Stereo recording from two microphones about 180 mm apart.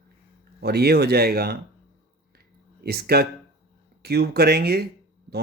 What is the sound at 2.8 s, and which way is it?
Speech, 60° right (ahead or behind).